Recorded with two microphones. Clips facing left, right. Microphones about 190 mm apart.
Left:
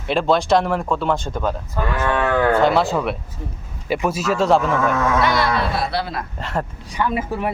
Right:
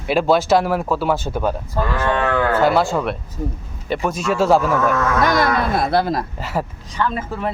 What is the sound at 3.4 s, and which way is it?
Speech, 40° right (ahead or behind).